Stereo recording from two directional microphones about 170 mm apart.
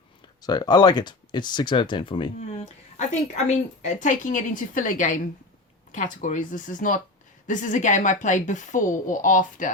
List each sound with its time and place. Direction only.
0.4 s speech: 25° left (ahead or behind)
3.1 s a woman's voice: 40° left (ahead or behind)